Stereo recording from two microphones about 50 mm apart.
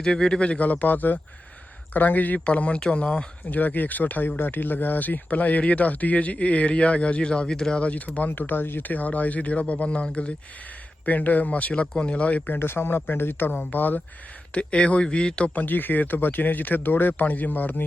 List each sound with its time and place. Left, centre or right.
0.0 s speech: centre
0.7 s speech: left; by 7.8 s centre
7.8 s speech: left
12.5 s a man's voice: left
13.5 s speech: left
14.5 s speech: left
15.5 s speech: left